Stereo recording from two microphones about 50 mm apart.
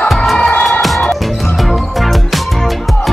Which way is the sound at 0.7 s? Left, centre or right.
Centre.